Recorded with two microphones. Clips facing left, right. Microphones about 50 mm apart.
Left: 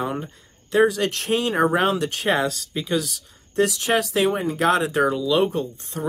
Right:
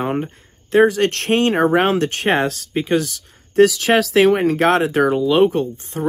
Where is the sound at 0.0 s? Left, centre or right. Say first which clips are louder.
Right 5 dB; right.